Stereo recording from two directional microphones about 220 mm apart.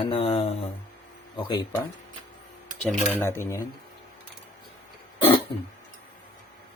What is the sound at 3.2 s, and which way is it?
Speech, 10° left (ahead or behind).